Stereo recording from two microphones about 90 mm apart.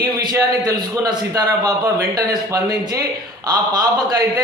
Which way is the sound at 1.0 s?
45° right (ahead or behind).